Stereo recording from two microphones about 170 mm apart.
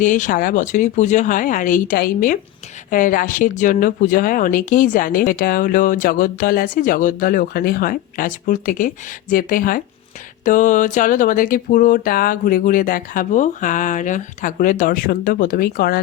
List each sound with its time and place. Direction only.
0.0 s speech: 50° left (ahead or behind)